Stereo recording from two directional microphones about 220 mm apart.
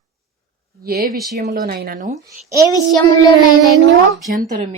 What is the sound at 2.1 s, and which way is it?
Speech, 15° right (ahead or behind).